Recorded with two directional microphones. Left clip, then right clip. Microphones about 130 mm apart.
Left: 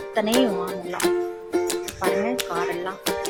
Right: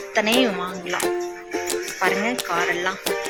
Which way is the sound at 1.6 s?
Centre (ahead or behind).